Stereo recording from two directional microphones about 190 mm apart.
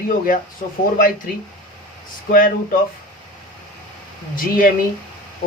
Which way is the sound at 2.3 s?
45° left (ahead or behind).